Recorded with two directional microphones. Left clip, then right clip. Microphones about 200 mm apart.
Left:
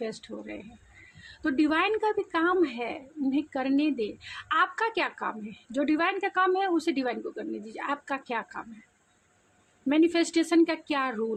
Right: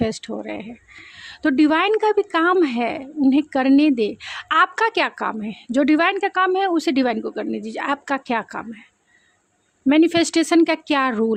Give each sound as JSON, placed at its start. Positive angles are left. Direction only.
{"t": 0.0, "sound": "a woman's voice", "side_deg": -50}
{"t": 9.8, "sound": "a woman's voice", "side_deg": -45}